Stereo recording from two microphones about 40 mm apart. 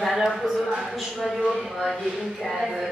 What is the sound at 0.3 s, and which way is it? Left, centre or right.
Speech, centre.